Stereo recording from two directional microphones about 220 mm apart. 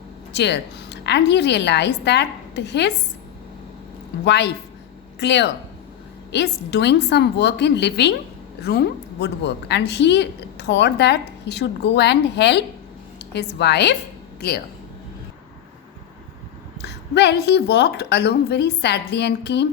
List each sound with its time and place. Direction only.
0.3 s a woman's voice: 50° left (ahead or behind)
4.3 s a woman's voice: 50° left (ahead or behind)
16.8 s a woman's voice: 50° left (ahead or behind)